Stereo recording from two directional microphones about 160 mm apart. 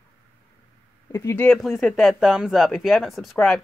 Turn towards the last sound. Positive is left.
turn(degrees=5)  # may be behind; listen again after turning